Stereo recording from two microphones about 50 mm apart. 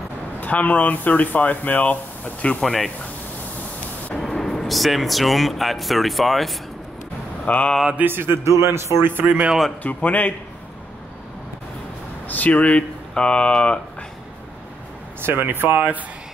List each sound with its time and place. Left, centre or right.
0.4 s speech: left
2.6 s speech: centre
4.2 s speech: centre
7.4 s speech: left
8.1 s speech: right
8.5 s speech: right
9.2 s speech: right
9.8 s speech: left
12.3 s speech: left
13.1 s speech: centre
15.2 s speech: right
15.7 s speech: right